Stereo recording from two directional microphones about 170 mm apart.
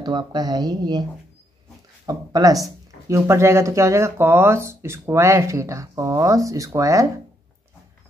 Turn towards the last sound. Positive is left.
turn(degrees=-20)  # may be behind; listen again after turning